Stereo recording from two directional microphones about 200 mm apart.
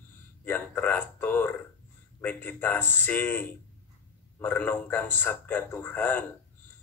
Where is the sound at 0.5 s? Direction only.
10° left (ahead or behind).